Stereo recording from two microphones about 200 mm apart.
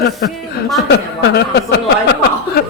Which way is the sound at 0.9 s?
55° left (ahead or behind).